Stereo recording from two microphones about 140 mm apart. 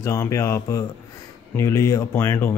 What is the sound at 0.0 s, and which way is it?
Speech, 20° left (ahead or behind).